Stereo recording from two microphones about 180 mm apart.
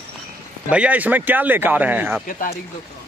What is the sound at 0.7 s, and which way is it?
Speech, 5° right (ahead or behind).